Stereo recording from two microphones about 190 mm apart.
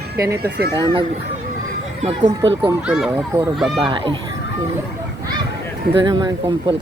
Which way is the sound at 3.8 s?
25° right (ahead or behind).